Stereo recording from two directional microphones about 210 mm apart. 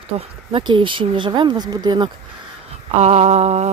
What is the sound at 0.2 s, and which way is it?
Speech, 25° right (ahead or behind).